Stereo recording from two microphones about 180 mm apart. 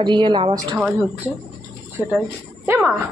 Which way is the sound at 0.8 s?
10° right (ahead or behind).